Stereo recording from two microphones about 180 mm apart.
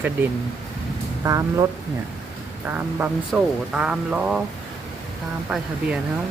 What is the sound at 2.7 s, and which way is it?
Speech, 10° right (ahead or behind).